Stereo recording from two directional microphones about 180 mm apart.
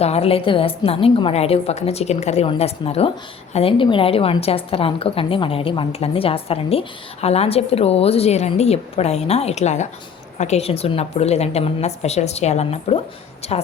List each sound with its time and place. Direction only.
0.0 s a woman's voice: 35° left (ahead or behind)